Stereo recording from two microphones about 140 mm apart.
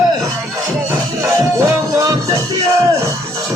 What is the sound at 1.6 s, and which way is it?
Music, 20° right (ahead or behind).